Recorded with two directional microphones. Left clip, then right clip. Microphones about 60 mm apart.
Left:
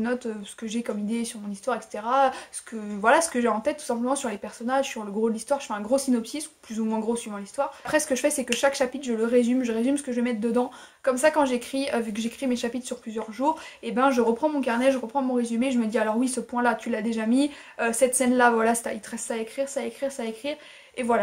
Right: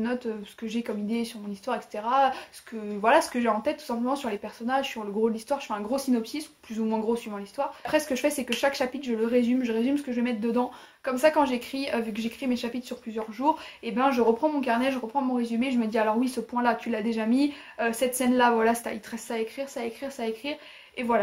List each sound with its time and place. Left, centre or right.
0.0 s speech: left
7.8 s speech: left